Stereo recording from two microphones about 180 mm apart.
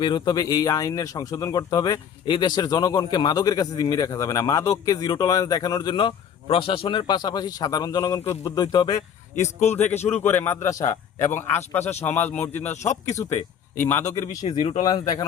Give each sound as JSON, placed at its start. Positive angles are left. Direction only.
{"t": 0.0, "sound": "speech", "side_deg": 25}
{"t": 9.4, "sound": "a man's voice", "side_deg": 40}
{"t": 9.7, "sound": "a man's voice", "side_deg": 10}
{"t": 10.0, "sound": "a man's voice", "side_deg": 35}
{"t": 10.2, "sound": "a man's voice", "side_deg": 10}
{"t": 14.4, "sound": "a man's voice", "side_deg": 35}
{"t": 14.8, "sound": "speech", "side_deg": 20}